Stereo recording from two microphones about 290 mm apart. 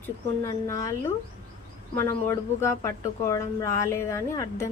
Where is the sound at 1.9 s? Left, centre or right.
Centre.